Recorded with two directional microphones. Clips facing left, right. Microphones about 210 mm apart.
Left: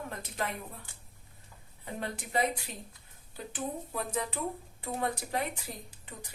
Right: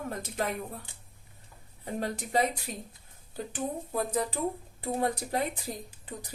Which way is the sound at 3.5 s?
40° right (ahead or behind).